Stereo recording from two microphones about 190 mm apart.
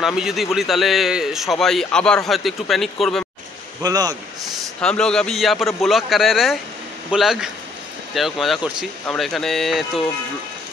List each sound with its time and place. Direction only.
0.0 s a man's voice: 5° right (ahead or behind)
3.8 s speech: 20° right (ahead or behind)
4.8 s a man's voice: 5° left (ahead or behind)